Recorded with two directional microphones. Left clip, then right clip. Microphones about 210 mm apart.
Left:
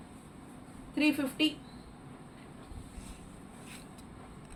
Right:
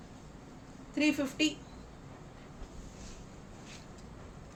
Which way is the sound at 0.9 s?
20° right (ahead or behind).